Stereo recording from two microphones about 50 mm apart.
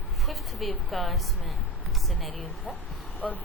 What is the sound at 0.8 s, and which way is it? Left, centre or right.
Speech, centre.